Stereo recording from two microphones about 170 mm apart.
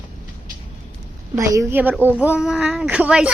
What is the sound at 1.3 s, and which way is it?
Speech, 15° right (ahead or behind).